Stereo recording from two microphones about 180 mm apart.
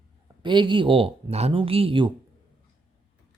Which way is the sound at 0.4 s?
25° right (ahead or behind).